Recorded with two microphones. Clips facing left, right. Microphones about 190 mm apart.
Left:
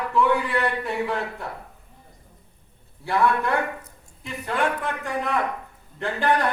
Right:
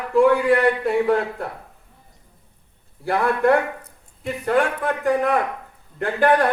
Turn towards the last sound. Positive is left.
turn(degrees=-55)  # may be behind; listen again after turning